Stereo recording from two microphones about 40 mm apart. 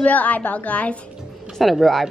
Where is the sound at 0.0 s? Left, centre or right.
Left.